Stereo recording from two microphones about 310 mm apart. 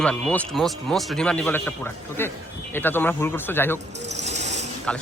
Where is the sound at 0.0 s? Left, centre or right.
Centre.